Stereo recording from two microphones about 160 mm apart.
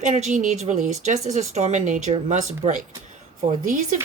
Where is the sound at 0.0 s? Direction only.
50° right (ahead or behind).